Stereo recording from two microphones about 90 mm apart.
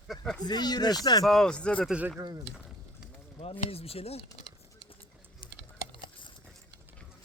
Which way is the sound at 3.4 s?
90° left.